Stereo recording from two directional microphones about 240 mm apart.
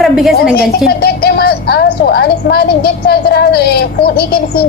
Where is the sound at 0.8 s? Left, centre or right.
Left.